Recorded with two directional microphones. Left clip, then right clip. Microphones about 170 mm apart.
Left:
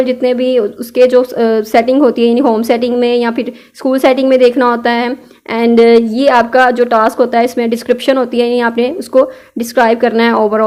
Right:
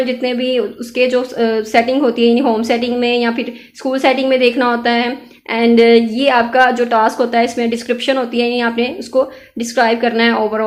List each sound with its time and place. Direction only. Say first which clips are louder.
0.0 s speech: left 5 dB; 45° left (ahead or behind)